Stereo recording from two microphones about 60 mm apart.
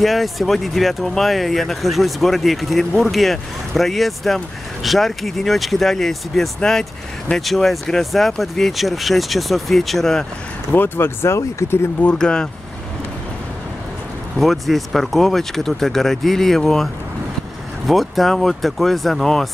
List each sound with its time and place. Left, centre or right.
0.0 s speech: centre
10.7 s speech: left
11.2 s speech: left
12.0 s speech: centre
14.4 s speech: centre